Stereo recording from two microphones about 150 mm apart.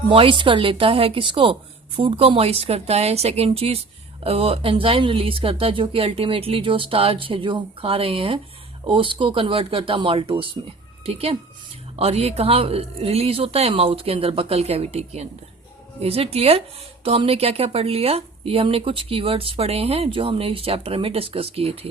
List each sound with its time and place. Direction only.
0.1 s a woman's voice: 35° right (ahead or behind)